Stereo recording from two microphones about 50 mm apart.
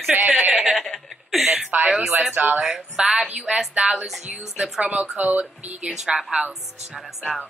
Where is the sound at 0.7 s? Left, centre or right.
Centre.